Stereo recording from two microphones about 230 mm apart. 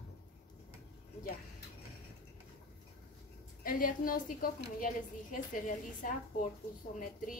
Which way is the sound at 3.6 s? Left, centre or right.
Left.